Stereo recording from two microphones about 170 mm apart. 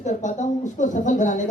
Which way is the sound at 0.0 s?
45° left (ahead or behind).